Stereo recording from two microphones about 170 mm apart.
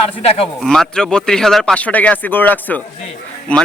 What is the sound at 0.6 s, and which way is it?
A man's voice, 5° left (ahead or behind).